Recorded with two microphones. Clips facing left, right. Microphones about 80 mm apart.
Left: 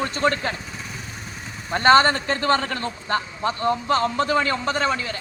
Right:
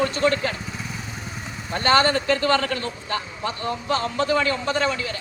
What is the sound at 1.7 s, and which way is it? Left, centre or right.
Speech, left.